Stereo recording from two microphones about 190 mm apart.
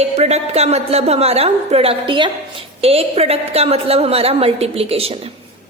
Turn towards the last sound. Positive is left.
turn(degrees=-30)  # may be behind; listen again after turning